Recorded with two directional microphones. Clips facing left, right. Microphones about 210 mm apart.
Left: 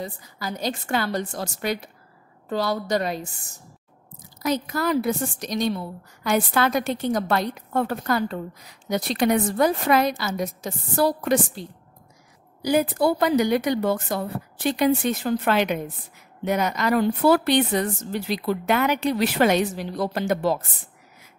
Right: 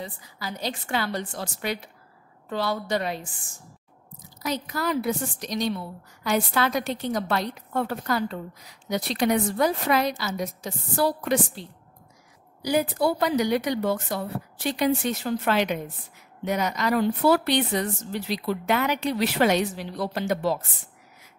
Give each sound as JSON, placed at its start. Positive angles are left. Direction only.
{"t": 0.0, "sound": "a woman's voice", "side_deg": 45}
{"t": 12.6, "sound": "speech", "side_deg": 50}